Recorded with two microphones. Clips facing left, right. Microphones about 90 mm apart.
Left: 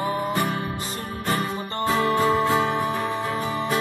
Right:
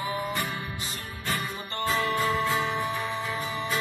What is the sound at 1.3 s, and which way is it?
Music, 40° left (ahead or behind).